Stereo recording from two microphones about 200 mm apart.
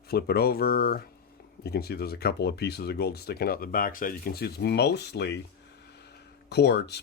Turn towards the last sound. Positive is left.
turn(degrees=55)  # may be behind; listen again after turning